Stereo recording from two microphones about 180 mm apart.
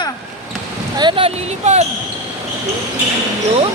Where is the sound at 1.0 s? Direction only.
30° right (ahead or behind).